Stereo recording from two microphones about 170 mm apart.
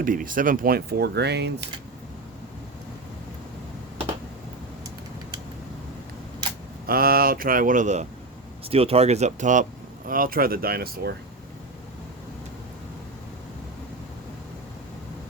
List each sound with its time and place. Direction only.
0.0 s speech: 55° right (ahead or behind); by 1.5 s 75° right (ahead or behind)
6.8 s speech: 60° right (ahead or behind)
8.7 s speech: 35° right (ahead or behind); by 11.1 s 65° right (ahead or behind)